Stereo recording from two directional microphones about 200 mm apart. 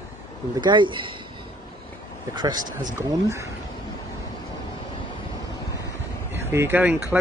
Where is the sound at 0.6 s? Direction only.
25° right (ahead or behind).